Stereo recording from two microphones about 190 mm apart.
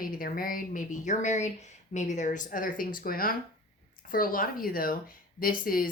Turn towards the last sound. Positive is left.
turn(degrees=50)  # may be behind; listen again after turning